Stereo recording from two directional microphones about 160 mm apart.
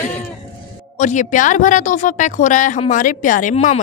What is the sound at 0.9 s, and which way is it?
A woman's voice, 50° left (ahead or behind).